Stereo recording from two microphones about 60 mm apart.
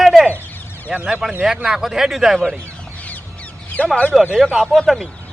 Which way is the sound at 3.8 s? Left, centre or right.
Left.